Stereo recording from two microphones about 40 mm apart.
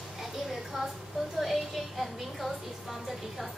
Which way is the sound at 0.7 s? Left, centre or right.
Centre.